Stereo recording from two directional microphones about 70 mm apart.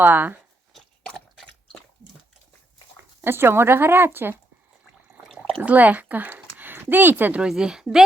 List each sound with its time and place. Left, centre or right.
0.0 s speech: right
0.7 s chewing: centre
3.2 s speech: right
5.2 s a sound: centre
5.6 s speech: right
7.4 s speech: centre